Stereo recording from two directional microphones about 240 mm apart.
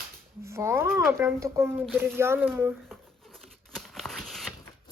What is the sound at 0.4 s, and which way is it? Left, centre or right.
Speech, centre.